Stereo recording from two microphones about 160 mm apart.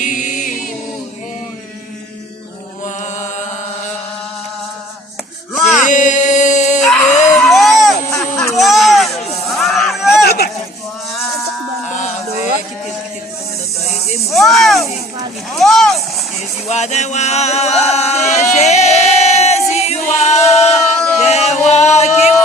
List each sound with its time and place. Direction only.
0.0 s a capella: 50° left (ahead or behind)
2.8 s music: 50° left (ahead or behind)
5.5 s music: centre (ahead or behind)
5.8 s music: 50° left (ahead or behind)
6.8 s screaming: 5° left (ahead or behind)
7.3 s a sound: centre (ahead or behind)
9.5 s crowd: centre (ahead or behind)
10.2 s a sound: 80° left
14.3 s snake: centre (ahead or behind)
15.5 s a sound: centre (ahead or behind)
16.6 s a sound: 45° left (ahead or behind)
21.2 s music: 45° left (ahead or behind)